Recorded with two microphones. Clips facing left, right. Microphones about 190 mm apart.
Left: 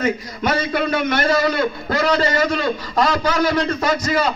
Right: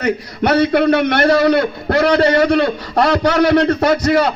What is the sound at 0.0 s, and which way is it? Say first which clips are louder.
A man's voice: right 3 dB; 65° right (ahead or behind).